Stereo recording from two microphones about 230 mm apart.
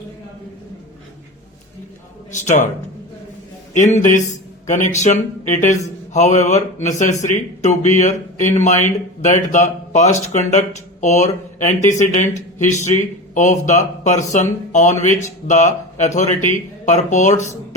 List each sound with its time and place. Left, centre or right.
2.3 s speech: left
3.8 s speech: left